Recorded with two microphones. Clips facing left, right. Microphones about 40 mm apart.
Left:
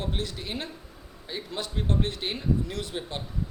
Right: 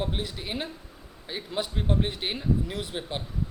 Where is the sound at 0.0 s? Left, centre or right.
Centre.